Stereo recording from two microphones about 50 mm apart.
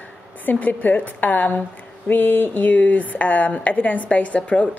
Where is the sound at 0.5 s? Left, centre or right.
Left.